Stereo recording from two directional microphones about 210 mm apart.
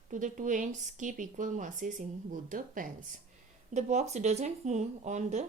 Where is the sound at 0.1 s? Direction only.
40° right (ahead or behind).